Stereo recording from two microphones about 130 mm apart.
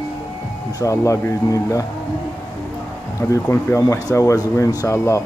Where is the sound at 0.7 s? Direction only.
25° left (ahead or behind).